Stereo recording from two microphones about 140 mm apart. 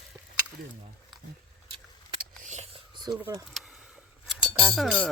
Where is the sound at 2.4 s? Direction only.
60° right (ahead or behind).